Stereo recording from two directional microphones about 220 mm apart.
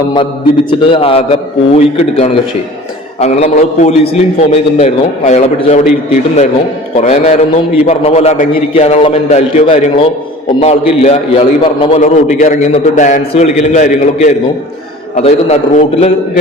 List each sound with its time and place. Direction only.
0.7 s a man's voice: 25° left (ahead or behind)
6.9 s a man's voice: 30° left (ahead or behind)